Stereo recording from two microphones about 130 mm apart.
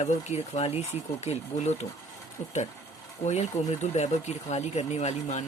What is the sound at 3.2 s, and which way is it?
Speech, 60° left (ahead or behind).